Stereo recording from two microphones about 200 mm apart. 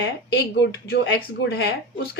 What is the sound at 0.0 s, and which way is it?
A woman's voice, 60° left (ahead or behind).